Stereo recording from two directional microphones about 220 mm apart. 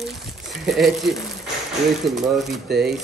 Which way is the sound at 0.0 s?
Centre (ahead or behind).